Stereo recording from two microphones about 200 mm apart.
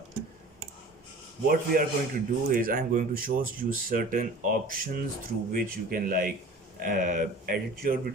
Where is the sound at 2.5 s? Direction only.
45° right (ahead or behind).